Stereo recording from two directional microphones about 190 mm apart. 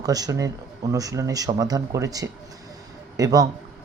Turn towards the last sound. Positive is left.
turn(degrees=-20)  # may be behind; listen again after turning